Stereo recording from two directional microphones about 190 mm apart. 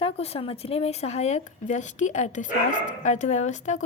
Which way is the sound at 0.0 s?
30° left (ahead or behind).